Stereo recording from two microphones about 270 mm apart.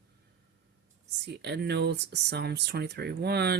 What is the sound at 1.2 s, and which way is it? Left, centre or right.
Speech, right.